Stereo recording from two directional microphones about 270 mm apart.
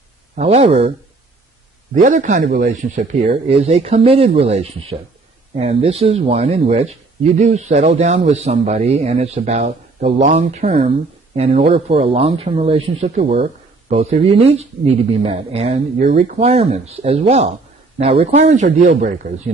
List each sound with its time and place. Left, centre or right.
0.4 s speech: right
2.0 s speech: right